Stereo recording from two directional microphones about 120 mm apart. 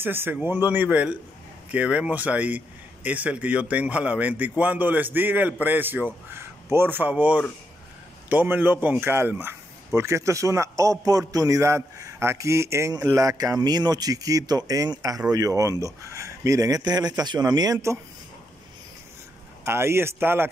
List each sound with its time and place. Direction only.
0.0 s a man's voice: 20° right (ahead or behind)
19.6 s speech: 20° right (ahead or behind)